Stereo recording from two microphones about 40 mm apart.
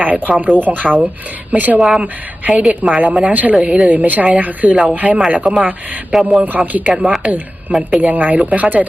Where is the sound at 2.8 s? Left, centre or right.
Right.